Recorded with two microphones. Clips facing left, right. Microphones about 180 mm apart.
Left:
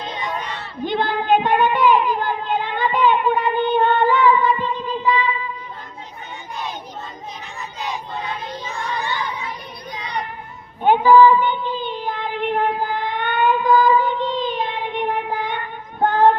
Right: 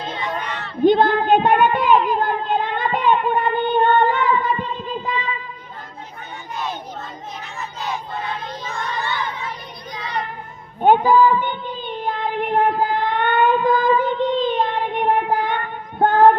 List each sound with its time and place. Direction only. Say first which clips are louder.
0.9 s child singing: right 5 dB; 55° right (ahead or behind)
8.6 s crowd: even; 15° left (ahead or behind)
10.8 s child singing: left 2 dB; 45° right (ahead or behind)